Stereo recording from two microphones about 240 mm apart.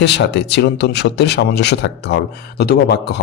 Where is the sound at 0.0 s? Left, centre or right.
Left.